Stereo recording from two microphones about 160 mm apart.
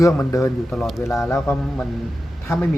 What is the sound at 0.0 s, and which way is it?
Speech, 20° left (ahead or behind).